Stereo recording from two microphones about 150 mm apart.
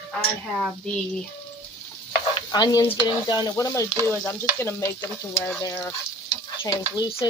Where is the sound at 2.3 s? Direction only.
30° left (ahead or behind).